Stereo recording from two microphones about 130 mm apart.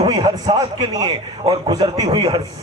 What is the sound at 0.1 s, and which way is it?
A man's voice, 30° right (ahead or behind).